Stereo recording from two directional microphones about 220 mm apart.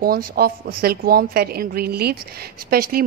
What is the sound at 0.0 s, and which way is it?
A woman's voice, 40° right (ahead or behind).